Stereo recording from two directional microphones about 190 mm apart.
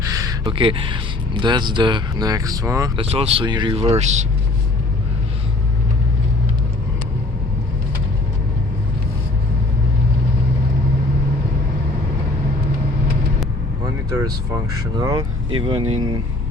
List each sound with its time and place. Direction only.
0.0 s a sound: 15° right (ahead or behind)
0.4 s speech: 25° right (ahead or behind)
3.0 s speech: 30° right (ahead or behind)
14.9 s speech: 20° right (ahead or behind)